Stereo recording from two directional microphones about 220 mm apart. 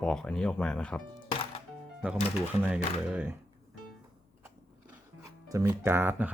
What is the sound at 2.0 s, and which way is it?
Speech, 5° right (ahead or behind).